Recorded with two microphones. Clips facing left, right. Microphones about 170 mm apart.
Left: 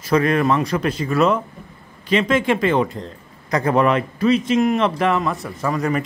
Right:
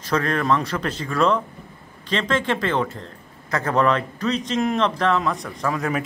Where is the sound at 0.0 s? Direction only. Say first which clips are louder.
Left 5 dB; 10° left (ahead or behind).